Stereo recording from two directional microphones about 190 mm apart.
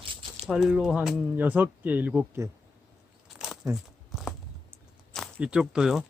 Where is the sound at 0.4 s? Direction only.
5° right (ahead or behind).